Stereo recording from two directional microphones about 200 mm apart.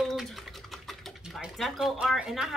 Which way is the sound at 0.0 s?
Centre (ahead or behind).